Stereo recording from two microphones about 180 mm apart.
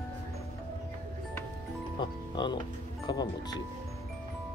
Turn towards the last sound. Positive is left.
turn(degrees=20)  # may be behind; listen again after turning